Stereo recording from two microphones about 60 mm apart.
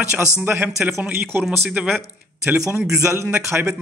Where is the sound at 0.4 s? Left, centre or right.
Right.